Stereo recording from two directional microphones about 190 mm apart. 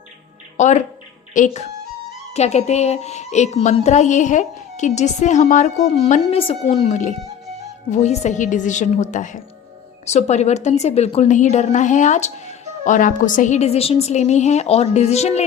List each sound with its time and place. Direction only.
0.5 s a woman's voice: 40° left (ahead or behind)